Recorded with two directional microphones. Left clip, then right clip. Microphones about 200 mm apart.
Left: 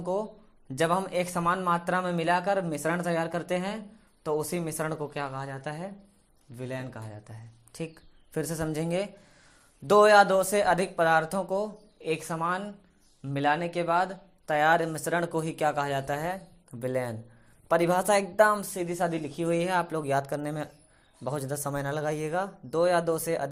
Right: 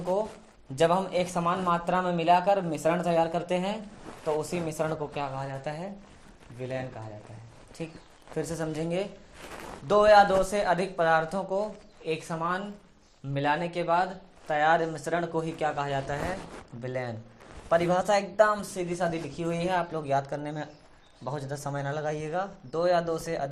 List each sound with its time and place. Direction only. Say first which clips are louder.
0.0 s a man's voice: right 2 dB; 40° left (ahead or behind)